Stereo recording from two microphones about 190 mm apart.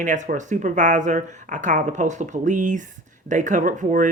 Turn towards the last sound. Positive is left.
turn(degrees=-40)  # may be behind; listen again after turning